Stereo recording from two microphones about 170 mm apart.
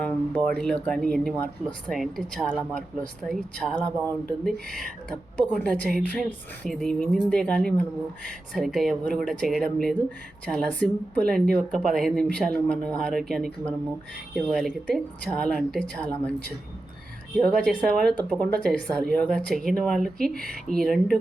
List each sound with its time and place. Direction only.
0.0 s a woman's voice: 10° left (ahead or behind)
3.8 s speech: 20° right (ahead or behind)
4.7 s a woman's voice: 5° left (ahead or behind)
17.4 s a woman's voice: 5° left (ahead or behind)